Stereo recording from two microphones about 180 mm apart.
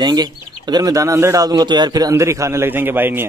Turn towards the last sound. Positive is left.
turn(degrees=-10)  # may be behind; listen again after turning